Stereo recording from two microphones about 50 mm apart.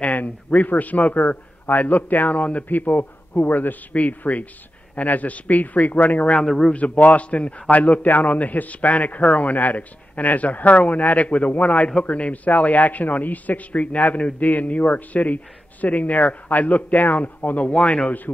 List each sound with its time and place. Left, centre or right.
0.0 s a man's voice: left
6.4 s a man's voice: centre
6.7 s a man's voice: left